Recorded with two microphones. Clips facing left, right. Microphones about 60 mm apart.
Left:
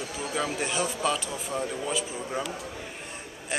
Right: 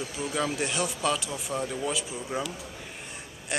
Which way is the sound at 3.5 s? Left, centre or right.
Centre.